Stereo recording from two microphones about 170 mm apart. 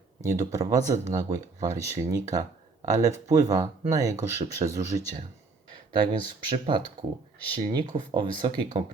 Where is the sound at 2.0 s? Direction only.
20° right (ahead or behind).